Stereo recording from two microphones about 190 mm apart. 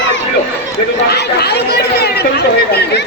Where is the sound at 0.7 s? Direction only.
60° left (ahead or behind).